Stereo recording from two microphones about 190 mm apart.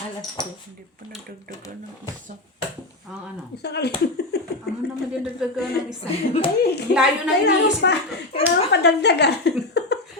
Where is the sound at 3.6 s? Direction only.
60° left (ahead or behind).